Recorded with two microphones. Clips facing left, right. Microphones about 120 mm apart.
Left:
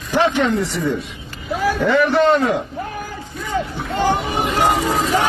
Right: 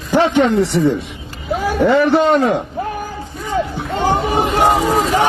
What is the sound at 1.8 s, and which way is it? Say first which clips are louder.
Speech: right 3 dB; 30° right (ahead or behind).